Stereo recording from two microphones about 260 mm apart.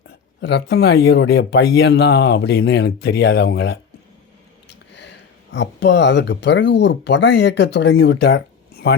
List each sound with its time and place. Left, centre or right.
0.4 s speech: left